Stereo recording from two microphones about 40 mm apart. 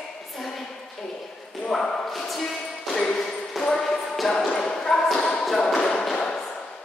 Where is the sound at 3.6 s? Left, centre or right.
Centre.